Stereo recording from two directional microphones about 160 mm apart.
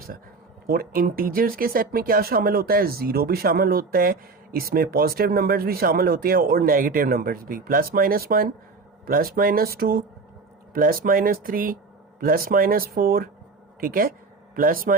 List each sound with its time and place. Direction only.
0.7 s speech: 65° right (ahead or behind)